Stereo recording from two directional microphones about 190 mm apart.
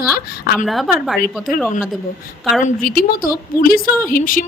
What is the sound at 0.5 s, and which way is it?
Speech, centre (ahead or behind).